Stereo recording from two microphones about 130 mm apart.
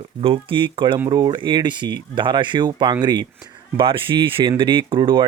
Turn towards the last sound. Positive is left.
turn(degrees=-35)  # may be behind; listen again after turning